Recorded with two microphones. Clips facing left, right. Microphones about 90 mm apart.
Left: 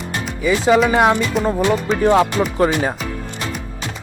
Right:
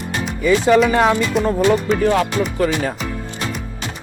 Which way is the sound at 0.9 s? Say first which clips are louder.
Even; 15° left (ahead or behind).